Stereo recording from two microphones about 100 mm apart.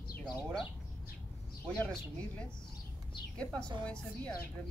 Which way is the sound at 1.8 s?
10° left (ahead or behind).